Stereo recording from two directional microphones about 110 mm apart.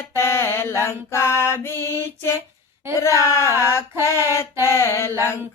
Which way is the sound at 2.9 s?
25° left (ahead or behind).